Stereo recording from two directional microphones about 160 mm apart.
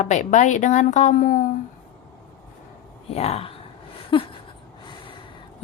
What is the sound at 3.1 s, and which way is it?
Speech, 40° left (ahead or behind).